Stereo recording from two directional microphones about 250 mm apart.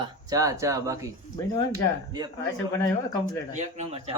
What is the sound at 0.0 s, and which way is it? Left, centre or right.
Speech, centre.